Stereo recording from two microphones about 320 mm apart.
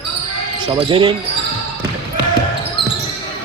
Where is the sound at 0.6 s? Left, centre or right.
Centre.